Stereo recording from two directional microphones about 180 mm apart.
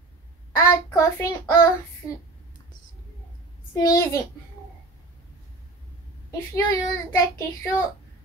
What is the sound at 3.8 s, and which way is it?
Speech, 20° left (ahead or behind).